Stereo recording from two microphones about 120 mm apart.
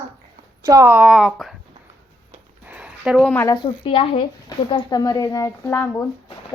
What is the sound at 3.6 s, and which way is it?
Speech, 45° left (ahead or behind).